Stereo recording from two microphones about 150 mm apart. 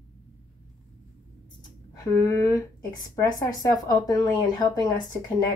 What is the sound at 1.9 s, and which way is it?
Speech, 25° left (ahead or behind).